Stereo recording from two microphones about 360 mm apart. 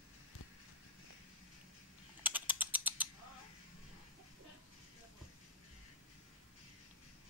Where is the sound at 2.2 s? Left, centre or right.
Centre.